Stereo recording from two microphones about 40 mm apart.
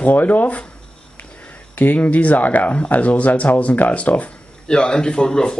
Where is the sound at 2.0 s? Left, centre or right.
Left.